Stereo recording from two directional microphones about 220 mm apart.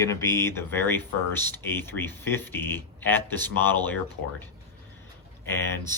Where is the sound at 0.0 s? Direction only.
15° left (ahead or behind).